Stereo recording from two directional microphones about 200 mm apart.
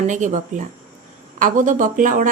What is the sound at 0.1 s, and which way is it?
Speech, 35° right (ahead or behind).